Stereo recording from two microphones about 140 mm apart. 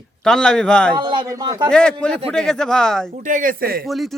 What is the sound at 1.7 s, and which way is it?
Speech, 5° left (ahead or behind).